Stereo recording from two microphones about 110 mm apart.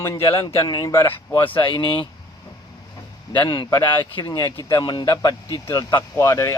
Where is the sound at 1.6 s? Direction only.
50° left (ahead or behind).